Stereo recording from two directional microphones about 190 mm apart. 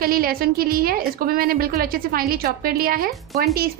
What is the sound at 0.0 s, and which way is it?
A woman's voice, 50° right (ahead or behind).